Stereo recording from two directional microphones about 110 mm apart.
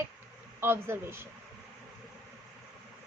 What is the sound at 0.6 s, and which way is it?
Speech, 20° right (ahead or behind).